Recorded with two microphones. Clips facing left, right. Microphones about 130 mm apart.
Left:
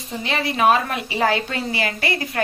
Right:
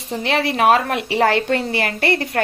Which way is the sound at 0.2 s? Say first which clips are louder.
Right 2 dB; 75° right (ahead or behind).